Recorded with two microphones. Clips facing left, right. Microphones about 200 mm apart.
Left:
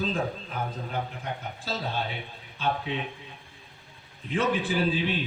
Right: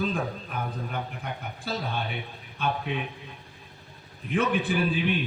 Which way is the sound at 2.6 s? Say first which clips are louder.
Even; 60° right (ahead or behind).